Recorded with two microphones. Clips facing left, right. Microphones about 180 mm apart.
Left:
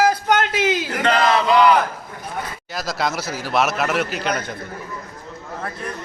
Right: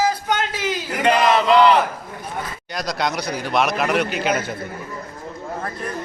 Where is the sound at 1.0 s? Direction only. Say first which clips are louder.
Right 2 dB; 15° right (ahead or behind).